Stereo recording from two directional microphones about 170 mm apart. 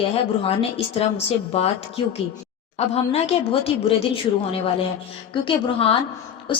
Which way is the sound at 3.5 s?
35° left (ahead or behind).